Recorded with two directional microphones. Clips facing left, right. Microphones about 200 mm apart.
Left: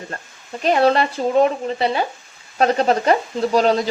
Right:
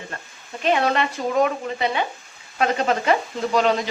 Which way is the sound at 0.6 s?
35° left (ahead or behind).